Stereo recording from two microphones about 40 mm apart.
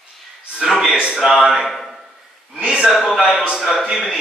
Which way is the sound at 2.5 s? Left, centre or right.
Right.